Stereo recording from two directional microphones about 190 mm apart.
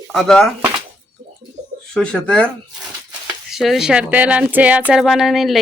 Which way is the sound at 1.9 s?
5° left (ahead or behind).